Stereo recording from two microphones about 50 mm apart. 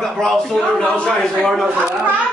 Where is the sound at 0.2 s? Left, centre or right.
Centre.